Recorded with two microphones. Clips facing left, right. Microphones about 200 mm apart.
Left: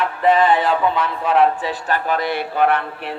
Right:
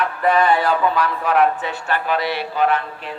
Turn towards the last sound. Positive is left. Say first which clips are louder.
# left 1 dB
turn(degrees=65)  # may be behind; listen again after turning